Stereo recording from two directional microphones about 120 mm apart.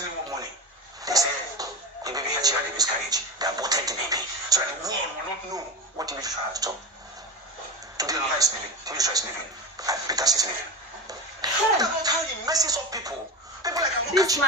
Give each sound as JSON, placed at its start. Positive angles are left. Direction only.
{"t": 1.0, "sound": "a woman's voice", "side_deg": -30}
{"t": 7.9, "sound": "a woman's voice", "side_deg": -30}